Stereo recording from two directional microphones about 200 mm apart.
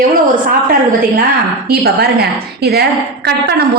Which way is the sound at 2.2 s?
55° right (ahead or behind).